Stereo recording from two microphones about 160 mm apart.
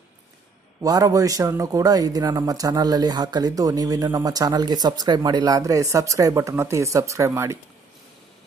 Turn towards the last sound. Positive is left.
turn(degrees=-15)  # may be behind; listen again after turning